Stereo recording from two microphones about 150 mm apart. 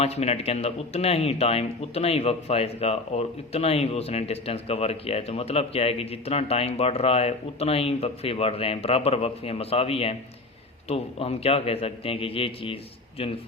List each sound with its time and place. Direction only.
0.0 s speech: 45° left (ahead or behind)